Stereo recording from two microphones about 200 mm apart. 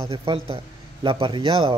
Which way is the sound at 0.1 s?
25° right (ahead or behind).